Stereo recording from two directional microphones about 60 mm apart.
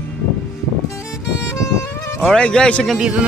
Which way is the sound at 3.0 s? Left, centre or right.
Centre.